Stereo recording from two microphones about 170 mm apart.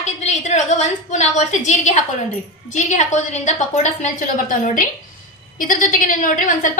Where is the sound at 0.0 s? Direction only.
40° left (ahead or behind).